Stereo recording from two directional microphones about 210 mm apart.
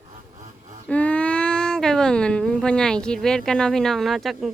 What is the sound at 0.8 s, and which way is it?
Speech, 5° left (ahead or behind).